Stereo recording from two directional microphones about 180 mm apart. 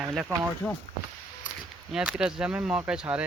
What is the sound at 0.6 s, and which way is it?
Speech, 10° left (ahead or behind).